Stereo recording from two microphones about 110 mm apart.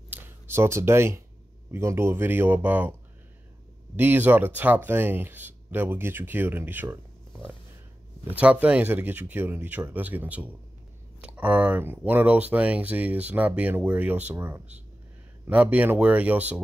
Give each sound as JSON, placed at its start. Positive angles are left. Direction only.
{"t": 0.1, "sound": "a man's voice", "side_deg": -20}
{"t": 8.3, "sound": "speech", "side_deg": -15}